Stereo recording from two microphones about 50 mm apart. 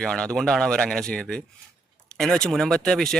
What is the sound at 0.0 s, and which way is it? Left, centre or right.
Speech, centre.